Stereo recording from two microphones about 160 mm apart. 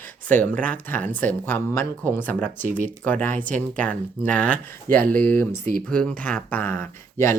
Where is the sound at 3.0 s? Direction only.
10° left (ahead or behind).